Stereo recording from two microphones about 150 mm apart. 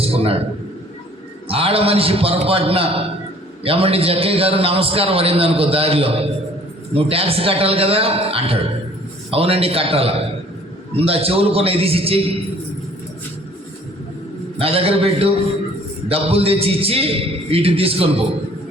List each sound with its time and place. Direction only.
0.0 s a man's voice: 40° right (ahead or behind)
1.5 s a man's voice: 40° right (ahead or behind)
14.6 s a man's voice: 40° right (ahead or behind)